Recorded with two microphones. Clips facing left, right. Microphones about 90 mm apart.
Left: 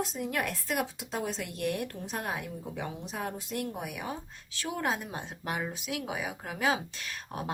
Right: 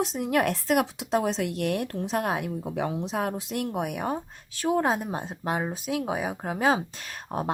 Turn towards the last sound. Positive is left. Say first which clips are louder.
# right 6 dB
turn(degrees=-40)  # may be behind; listen again after turning